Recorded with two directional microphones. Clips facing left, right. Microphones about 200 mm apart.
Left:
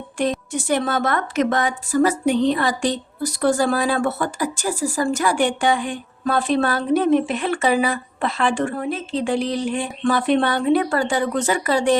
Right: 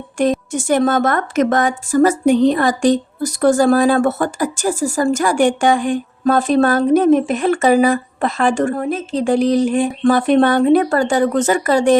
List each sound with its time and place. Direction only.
0.2 s a woman's voice: 45° right (ahead or behind)